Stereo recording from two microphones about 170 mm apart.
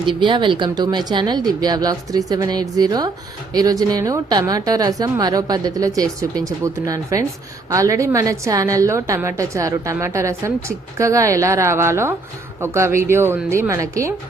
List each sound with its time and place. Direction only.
0.0 s a woman's voice: 30° right (ahead or behind)